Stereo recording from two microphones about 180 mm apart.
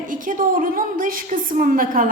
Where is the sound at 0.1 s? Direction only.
50° right (ahead or behind).